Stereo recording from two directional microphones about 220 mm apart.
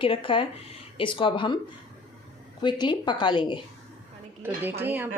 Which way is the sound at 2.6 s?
20° left (ahead or behind).